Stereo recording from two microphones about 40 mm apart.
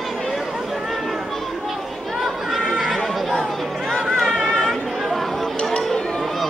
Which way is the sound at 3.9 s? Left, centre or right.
Centre.